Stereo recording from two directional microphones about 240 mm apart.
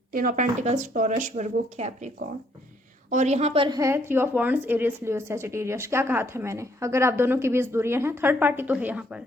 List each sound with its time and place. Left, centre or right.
0.1 s speech: right
3.1 s a woman's voice: right; by 9.0 s centre